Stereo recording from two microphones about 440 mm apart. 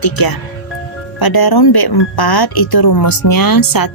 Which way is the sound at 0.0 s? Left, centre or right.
Left.